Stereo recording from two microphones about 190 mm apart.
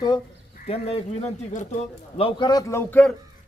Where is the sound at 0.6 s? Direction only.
30° left (ahead or behind); by 3.1 s 10° left (ahead or behind).